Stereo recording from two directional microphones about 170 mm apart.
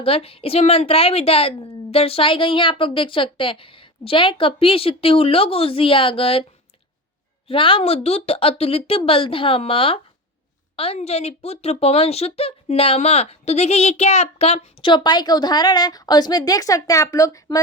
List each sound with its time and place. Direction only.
0.0 s a woman's voice: 35° left (ahead or behind)
7.4 s a woman's voice: 30° left (ahead or behind)